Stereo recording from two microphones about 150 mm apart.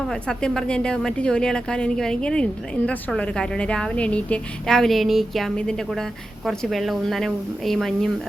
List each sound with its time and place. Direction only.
0.1 s a woman's voice: 5° left (ahead or behind)